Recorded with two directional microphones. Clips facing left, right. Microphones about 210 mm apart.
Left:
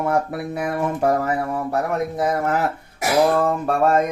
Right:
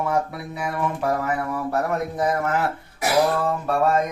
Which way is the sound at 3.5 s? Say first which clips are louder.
Left 2 dB; 50° left (ahead or behind).